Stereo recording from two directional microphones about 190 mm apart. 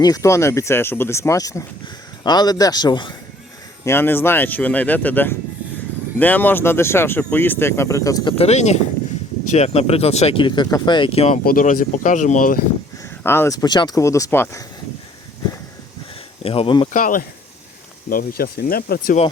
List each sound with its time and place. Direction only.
0.0 s a man's voice: 15° left (ahead or behind)
3.8 s speech: 10° left (ahead or behind); by 11.3 s 30° left (ahead or behind)
11.4 s speech: 45° left (ahead or behind)
13.2 s speech: 10° left (ahead or behind)
16.4 s a man's voice: 30° left (ahead or behind)
16.9 s speech: 45° left (ahead or behind)